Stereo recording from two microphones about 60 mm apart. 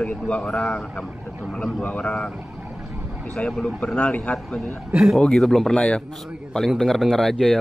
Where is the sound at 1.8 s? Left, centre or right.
Left.